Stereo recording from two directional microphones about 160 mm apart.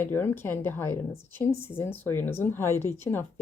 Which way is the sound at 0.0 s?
15° left (ahead or behind).